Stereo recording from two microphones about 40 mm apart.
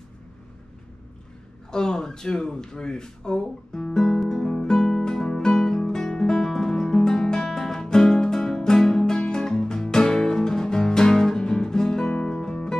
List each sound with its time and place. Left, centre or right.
1.7 s speech: centre
4.2 s music: centre